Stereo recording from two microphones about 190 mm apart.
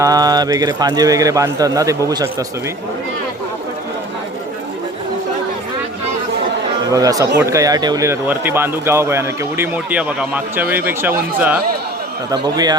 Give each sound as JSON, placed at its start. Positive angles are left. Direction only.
{"t": 0.0, "sound": "a man's voice", "side_deg": -20}
{"t": 6.9, "sound": "a man's voice", "side_deg": -20}
{"t": 12.3, "sound": "a man's voice", "side_deg": -20}